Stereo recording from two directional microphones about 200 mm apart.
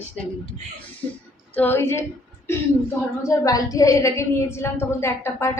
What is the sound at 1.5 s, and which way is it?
A woman's voice, 10° left (ahead or behind).